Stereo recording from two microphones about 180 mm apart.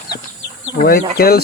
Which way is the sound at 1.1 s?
60° left (ahead or behind).